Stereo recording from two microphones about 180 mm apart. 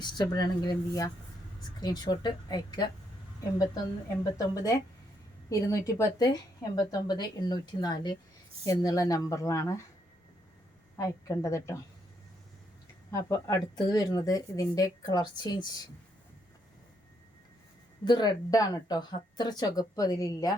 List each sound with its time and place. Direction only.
0.0 s speech: 25° left (ahead or behind)
4.2 s speech: 20° left (ahead or behind)
10.9 s speech: 20° left (ahead or behind)
13.1 s speech: 15° left (ahead or behind)
18.0 s speech: 25° left (ahead or behind)